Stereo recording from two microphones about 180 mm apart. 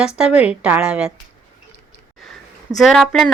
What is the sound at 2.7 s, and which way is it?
Speech, centre (ahead or behind).